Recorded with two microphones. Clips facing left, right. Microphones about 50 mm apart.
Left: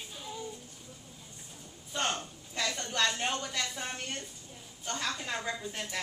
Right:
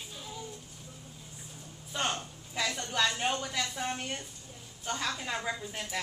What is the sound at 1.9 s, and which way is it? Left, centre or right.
A woman's voice, centre.